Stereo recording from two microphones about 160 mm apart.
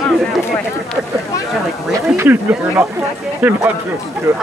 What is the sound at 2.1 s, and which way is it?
Speech, 15° right (ahead or behind).